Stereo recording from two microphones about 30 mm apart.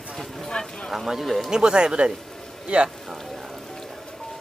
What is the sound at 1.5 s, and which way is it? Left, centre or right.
Speech, right.